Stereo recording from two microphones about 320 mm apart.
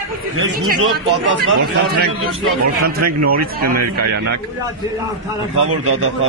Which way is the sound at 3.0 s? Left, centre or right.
Right.